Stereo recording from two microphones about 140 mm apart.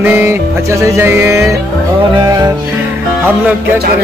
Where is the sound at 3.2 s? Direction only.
10° right (ahead or behind).